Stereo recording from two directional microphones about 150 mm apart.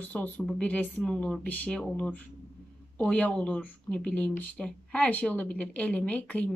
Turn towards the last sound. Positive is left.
turn(degrees=10)  # may be behind; listen again after turning